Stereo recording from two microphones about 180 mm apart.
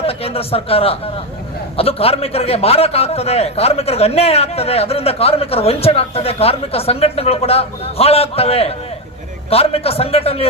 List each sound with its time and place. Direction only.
0.0 s a man's voice: 35° left (ahead or behind)